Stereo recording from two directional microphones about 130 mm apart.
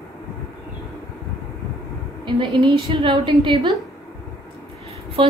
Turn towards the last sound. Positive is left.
turn(degrees=-40)  # may be behind; listen again after turning